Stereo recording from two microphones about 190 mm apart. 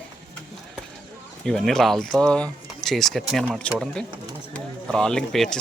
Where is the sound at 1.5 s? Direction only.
Centre (ahead or behind).